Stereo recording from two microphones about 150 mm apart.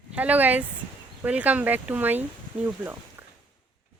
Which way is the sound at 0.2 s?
10° right (ahead or behind).